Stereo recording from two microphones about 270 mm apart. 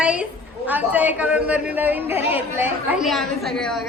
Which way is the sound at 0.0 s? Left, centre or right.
Centre.